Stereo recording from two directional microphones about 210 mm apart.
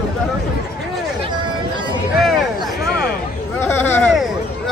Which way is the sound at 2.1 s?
Centre (ahead or behind).